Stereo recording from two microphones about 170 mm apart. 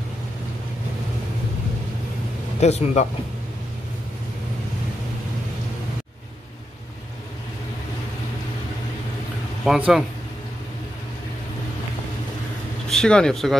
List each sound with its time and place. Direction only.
2.6 s speech: 40° left (ahead or behind)
9.7 s speech: 5° right (ahead or behind)
12.9 s speech: 5° left (ahead or behind)